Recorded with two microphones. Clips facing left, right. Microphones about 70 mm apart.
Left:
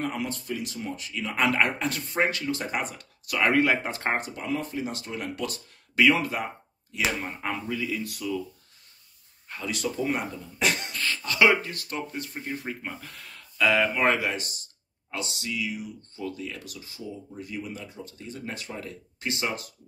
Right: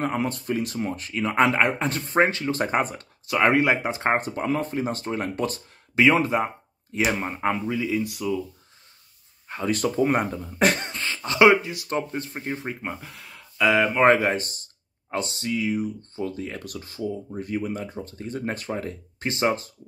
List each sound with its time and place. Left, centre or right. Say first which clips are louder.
0.0 s speech: right 5 dB; right
1.4 s speech: right 3 dB; right
2.5 s speech: right 6 dB; right
3.3 s speech: right 3 dB; right
4.2 s speech: right 5 dB; right; by 8.4 s centre
9.7 s speech: right 6 dB; right
10.9 s speech: right 1 dB; right
11.9 s speech: right 7 dB; right
12.9 s speech: right 3 dB; centre
14.0 s speech: right 6 dB; right